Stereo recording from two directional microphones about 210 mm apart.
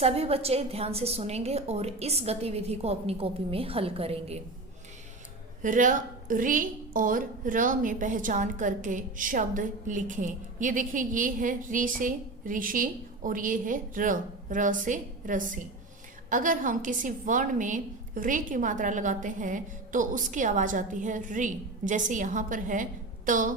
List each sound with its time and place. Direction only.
0.0 s a woman's voice: 30° right (ahead or behind)
5.6 s a woman's voice: 40° right (ahead or behind)